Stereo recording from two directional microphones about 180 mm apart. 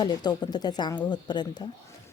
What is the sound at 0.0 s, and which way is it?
A woman's voice, 25° left (ahead or behind).